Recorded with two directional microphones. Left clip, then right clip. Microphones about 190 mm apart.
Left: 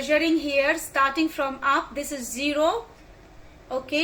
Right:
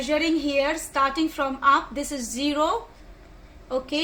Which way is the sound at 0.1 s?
45° right (ahead or behind).